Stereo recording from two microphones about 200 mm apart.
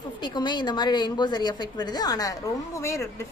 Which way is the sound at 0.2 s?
20° left (ahead or behind).